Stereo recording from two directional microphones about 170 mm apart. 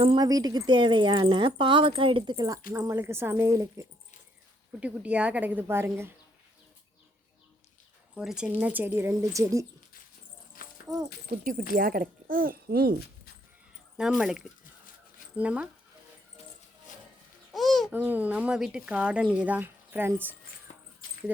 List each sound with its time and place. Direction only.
0.2 s a woman's voice: 20° right (ahead or behind)
8.1 s a woman's voice: 5° right (ahead or behind); by 9.6 s 20° right (ahead or behind)
10.6 s dog: 55° left (ahead or behind)
11.7 s speech: 60° right (ahead or behind)
13.9 s a woman's voice: centre (ahead or behind)
17.5 s babbling: centre (ahead or behind)
17.9 s a woman's voice: 10° right (ahead or behind)
21.0 s keys jangling: 60° left (ahead or behind)